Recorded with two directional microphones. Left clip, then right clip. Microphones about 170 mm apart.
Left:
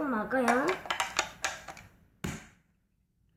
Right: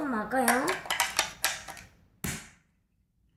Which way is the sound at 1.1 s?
5° left (ahead or behind).